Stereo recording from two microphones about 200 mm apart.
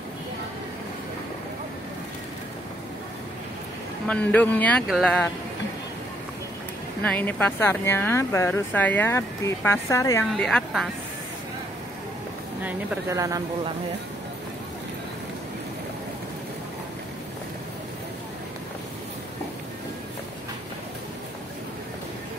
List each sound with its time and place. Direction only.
4.1 s speech: 5° left (ahead or behind)
7.0 s speech: 10° left (ahead or behind)
10.3 s a woman's voice: centre (ahead or behind)
12.6 s speech: 10° right (ahead or behind)